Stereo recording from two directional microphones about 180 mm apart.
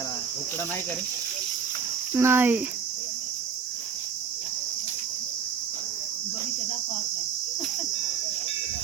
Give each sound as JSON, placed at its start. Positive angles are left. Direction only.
{"t": 2.1, "sound": "speech", "side_deg": -15}